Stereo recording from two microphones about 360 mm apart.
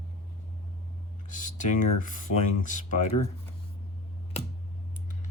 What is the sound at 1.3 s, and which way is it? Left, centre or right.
Speech, left.